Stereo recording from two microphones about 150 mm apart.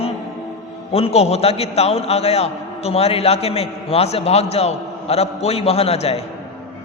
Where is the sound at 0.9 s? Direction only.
45° left (ahead or behind).